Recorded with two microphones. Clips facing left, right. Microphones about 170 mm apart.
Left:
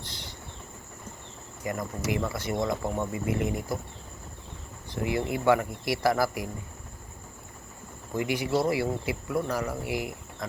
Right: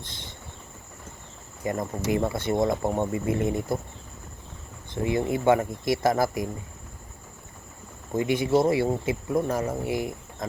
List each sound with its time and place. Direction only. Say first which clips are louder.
1.6 s speech: right 4 dB; 25° right (ahead or behind)
5.0 s speech: right 2 dB; 25° right (ahead or behind)
8.1 s speech: right 5 dB; 25° right (ahead or behind)